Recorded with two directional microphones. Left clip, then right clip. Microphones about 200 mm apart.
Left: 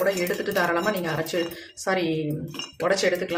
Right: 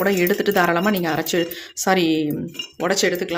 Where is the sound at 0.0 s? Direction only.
55° right (ahead or behind).